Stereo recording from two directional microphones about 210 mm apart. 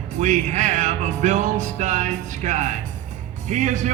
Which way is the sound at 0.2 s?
35° right (ahead or behind).